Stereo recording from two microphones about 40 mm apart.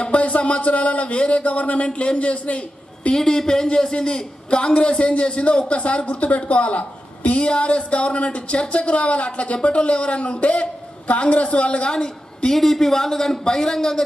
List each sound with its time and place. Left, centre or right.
0.0 s a sound: left
2.0 s a man's voice: left
3.2 s speech: centre; by 11.9 s left
12.5 s speech: centre